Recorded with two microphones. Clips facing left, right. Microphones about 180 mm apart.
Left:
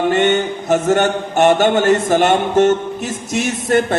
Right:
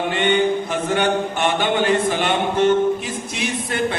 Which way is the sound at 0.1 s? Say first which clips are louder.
Left 3 dB; 45° left (ahead or behind).